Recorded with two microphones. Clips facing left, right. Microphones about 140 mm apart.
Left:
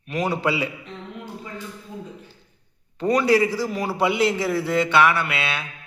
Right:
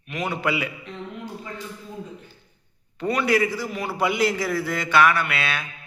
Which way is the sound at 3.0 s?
35° left (ahead or behind).